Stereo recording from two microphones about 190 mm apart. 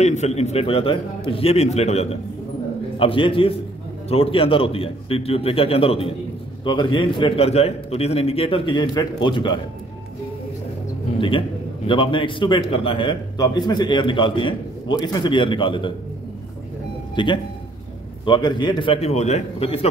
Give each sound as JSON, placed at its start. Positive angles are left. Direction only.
{"t": 0.0, "sound": "a man's voice", "side_deg": 35}
{"t": 11.1, "sound": "a man's voice", "side_deg": 25}
{"t": 17.1, "sound": "a man's voice", "side_deg": 25}